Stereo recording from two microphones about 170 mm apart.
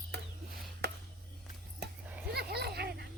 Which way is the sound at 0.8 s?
80° right.